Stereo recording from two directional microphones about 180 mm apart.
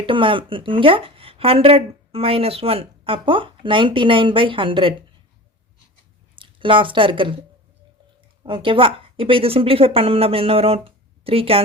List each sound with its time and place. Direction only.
0.0 s speech: 30° right (ahead or behind)
6.3 s speech: 30° right (ahead or behind)
8.4 s speech: 30° right (ahead or behind)